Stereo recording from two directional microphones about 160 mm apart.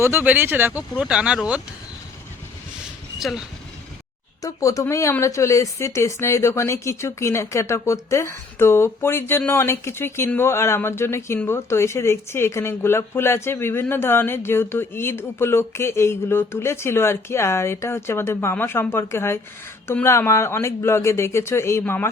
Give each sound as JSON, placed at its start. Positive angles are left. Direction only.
{"t": 0.0, "sound": "speech", "side_deg": -15}
{"t": 3.2, "sound": "speech", "side_deg": 0}
{"t": 4.4, "sound": "speech", "side_deg": 20}